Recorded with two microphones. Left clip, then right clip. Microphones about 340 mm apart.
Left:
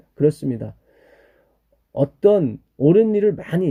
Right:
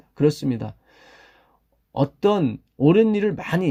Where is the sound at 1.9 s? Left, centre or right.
Centre.